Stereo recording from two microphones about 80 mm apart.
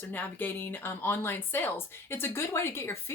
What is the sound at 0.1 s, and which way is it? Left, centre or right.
Speech, left.